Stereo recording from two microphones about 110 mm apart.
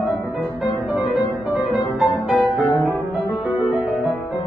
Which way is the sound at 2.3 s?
Centre (ahead or behind).